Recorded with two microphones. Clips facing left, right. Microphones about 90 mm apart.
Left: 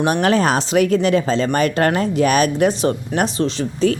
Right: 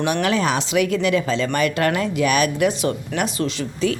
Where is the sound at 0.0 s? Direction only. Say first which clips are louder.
Left 4 dB; 40° left (ahead or behind).